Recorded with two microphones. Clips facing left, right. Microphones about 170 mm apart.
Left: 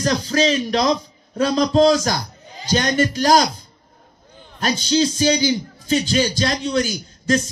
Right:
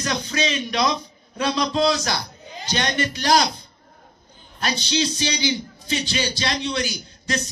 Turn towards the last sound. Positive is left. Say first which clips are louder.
# left 8 dB
turn(degrees=45)  # may be behind; listen again after turning